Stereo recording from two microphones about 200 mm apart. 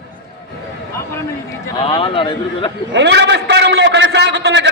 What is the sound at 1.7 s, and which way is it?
Speech, 25° left (ahead or behind).